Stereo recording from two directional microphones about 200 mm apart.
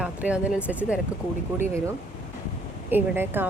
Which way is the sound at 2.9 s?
10° right (ahead or behind).